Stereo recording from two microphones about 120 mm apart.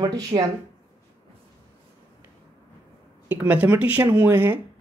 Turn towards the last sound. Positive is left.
turn(degrees=-15)  # may be behind; listen again after turning